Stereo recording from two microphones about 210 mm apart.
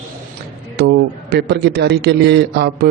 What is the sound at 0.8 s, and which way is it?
A man's voice, 50° right (ahead or behind).